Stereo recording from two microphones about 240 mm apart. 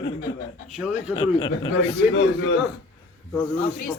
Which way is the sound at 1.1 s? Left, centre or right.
Centre.